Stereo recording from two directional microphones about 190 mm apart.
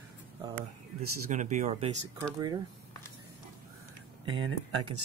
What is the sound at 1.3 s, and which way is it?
Speech, 40° right (ahead or behind).